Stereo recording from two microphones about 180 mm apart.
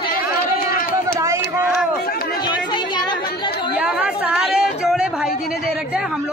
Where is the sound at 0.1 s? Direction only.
50° left (ahead or behind).